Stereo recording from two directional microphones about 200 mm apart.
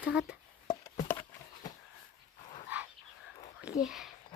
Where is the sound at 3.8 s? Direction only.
Centre (ahead or behind).